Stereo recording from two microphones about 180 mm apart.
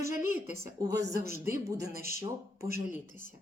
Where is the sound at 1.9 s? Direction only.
55° right (ahead or behind).